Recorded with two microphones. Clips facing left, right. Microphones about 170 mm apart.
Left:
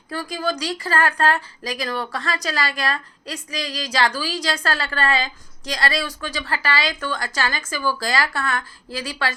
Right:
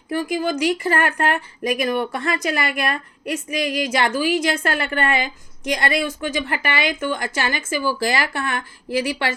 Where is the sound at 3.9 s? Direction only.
25° right (ahead or behind).